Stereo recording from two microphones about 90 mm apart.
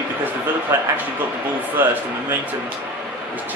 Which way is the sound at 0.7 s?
30° right (ahead or behind).